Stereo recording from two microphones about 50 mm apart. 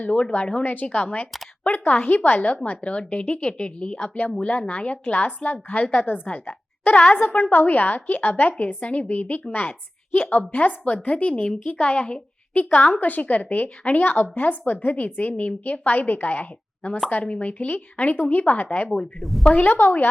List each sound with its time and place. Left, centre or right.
0.0 s a woman's voice: left
0.6 s a woman's voice: left
2.6 s a woman's voice: left
6.9 s a woman's voice: left
7.5 s a woman's voice: left
18.9 s speech: centre
19.5 s a woman's voice: left